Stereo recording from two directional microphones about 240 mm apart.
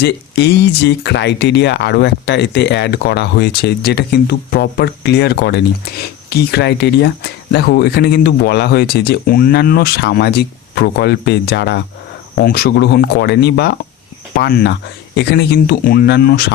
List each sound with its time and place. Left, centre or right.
0.0 s speech: left